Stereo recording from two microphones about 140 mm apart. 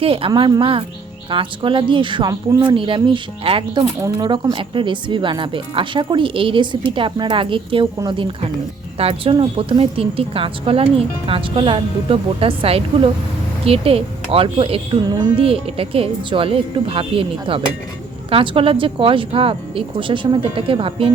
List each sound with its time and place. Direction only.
0.0 s a woman's voice: 40° right (ahead or behind)